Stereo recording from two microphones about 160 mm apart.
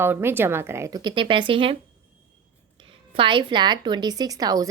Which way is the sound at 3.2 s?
30° right (ahead or behind).